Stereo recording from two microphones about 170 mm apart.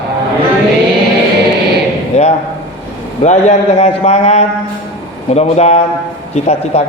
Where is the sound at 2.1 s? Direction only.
40° left (ahead or behind).